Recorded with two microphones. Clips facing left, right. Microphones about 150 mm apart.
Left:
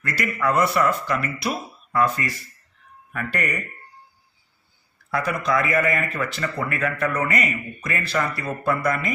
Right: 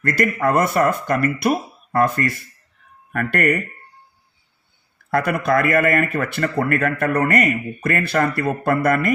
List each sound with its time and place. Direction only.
0.0 s speech: 50° right (ahead or behind)
5.1 s speech: 60° right (ahead or behind)